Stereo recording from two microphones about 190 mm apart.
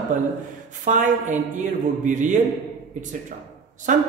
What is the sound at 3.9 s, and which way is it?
Speech, 40° right (ahead or behind).